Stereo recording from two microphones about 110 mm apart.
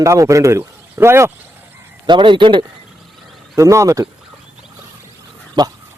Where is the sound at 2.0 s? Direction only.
45° right (ahead or behind).